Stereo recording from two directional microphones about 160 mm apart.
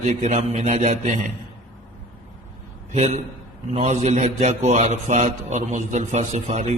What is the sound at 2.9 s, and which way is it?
A man's voice, 45° right (ahead or behind).